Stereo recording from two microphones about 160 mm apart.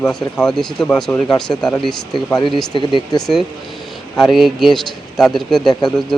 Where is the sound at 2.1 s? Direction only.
30° left (ahead or behind).